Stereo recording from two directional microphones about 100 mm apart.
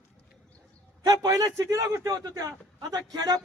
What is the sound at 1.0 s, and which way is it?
A man's voice, 35° right (ahead or behind).